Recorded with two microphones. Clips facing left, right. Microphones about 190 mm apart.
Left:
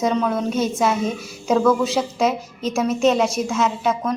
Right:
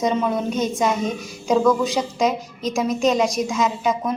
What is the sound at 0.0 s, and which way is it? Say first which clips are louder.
A woman's voice: left 1 dB; centre (ahead or behind).